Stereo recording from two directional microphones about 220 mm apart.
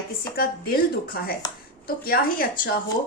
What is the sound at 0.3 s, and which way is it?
Speech, 40° left (ahead or behind).